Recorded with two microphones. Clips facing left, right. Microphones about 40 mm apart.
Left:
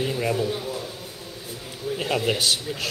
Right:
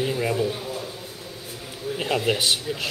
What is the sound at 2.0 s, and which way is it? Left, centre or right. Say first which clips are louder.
Speech: right 1 dB; centre.